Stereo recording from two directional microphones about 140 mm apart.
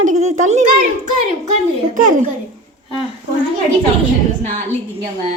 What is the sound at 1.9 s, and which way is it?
Speech, 65° right (ahead or behind).